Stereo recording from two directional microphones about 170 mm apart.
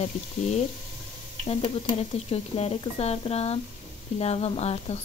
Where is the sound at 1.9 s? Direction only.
35° left (ahead or behind).